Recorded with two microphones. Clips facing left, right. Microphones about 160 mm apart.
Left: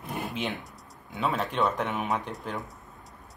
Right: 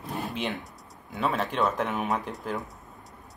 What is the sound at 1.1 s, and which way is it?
Speech, centre (ahead or behind).